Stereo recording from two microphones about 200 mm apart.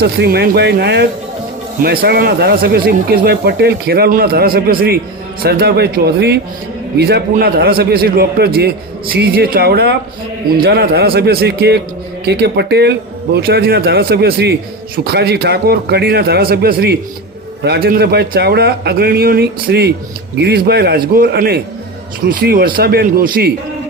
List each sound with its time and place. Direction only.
0.0 s speech: 55° right (ahead or behind)